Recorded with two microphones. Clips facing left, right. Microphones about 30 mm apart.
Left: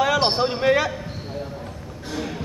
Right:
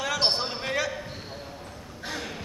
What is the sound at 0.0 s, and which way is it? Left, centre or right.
Speech, centre.